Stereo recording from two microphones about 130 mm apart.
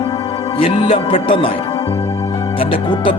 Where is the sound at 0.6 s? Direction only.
50° left (ahead or behind).